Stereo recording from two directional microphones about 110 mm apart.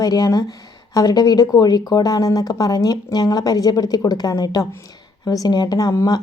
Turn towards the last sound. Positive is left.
turn(degrees=30)  # may be behind; listen again after turning